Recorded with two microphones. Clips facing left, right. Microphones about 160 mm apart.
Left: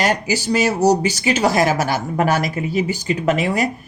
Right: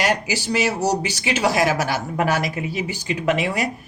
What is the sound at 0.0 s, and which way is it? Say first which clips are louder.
Speech: left 3 dB; 45° left (ahead or behind).